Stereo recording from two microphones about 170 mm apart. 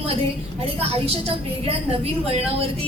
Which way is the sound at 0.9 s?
35° right (ahead or behind).